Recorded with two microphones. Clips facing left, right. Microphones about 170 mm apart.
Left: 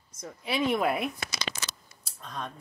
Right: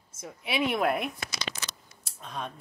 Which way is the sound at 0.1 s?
25° right (ahead or behind).